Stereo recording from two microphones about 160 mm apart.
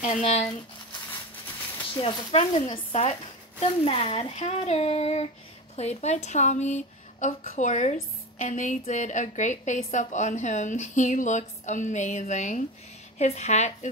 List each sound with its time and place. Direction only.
0.2 s speech: 40° left (ahead or behind)
2.0 s speech: 35° left (ahead or behind)
2.7 s a woman's voice: 50° left (ahead or behind)